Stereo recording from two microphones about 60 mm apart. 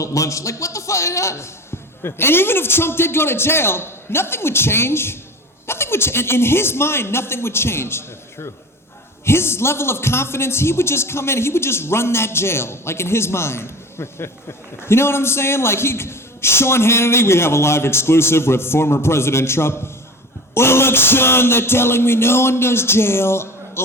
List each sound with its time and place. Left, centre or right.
0.0 s a man's voice: left
2.0 s a man's voice: left
9.2 s a man's voice: left